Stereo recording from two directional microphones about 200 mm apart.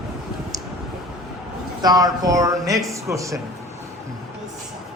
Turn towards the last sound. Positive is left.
turn(degrees=-15)  # may be behind; listen again after turning